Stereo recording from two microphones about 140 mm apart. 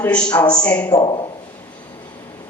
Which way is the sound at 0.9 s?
30° left (ahead or behind).